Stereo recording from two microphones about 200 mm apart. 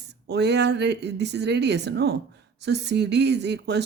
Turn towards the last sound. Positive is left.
turn(degrees=-55)  # may be behind; listen again after turning